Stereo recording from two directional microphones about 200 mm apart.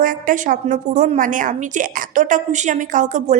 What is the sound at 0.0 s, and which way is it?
A woman's voice, 45° right (ahead or behind).